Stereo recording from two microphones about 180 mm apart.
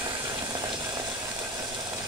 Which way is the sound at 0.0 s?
20° right (ahead or behind).